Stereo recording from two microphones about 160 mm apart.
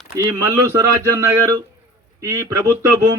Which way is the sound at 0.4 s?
20° right (ahead or behind).